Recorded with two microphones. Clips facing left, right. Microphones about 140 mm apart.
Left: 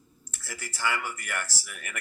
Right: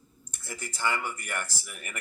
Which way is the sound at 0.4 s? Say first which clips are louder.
Even; 20° right (ahead or behind).